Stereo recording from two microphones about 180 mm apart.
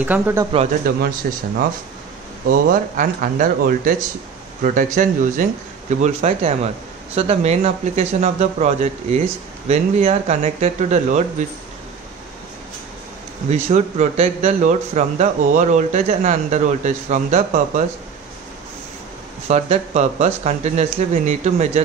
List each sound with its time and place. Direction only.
0.0 s speech: 10° right (ahead or behind)
0.9 s speech: 55° right (ahead or behind)
2.4 s speech: 50° right (ahead or behind)
13.5 s speech: 40° right (ahead or behind)
19.4 s speech: 40° right (ahead or behind)